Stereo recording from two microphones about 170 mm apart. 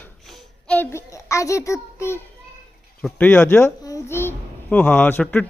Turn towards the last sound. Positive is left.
turn(degrees=10)  # may be behind; listen again after turning